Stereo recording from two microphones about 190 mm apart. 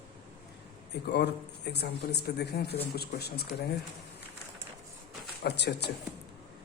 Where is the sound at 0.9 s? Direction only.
60° left (ahead or behind).